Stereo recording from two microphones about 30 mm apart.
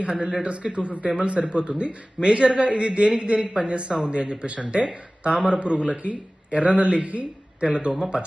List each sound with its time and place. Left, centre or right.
0.0 s a man's voice: right
3.7 s a man's voice: right
7.7 s a man's voice: right